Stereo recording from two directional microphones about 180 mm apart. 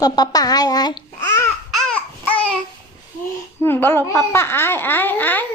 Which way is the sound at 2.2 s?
5° left (ahead or behind).